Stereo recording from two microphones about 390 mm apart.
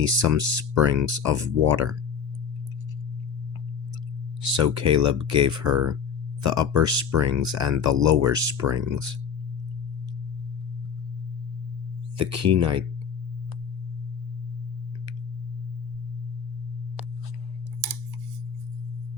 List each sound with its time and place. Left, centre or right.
0.0 s speech: right
4.4 s speech: right
12.1 s speech: right